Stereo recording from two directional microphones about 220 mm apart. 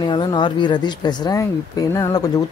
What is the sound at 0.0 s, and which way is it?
Speech, 20° left (ahead or behind).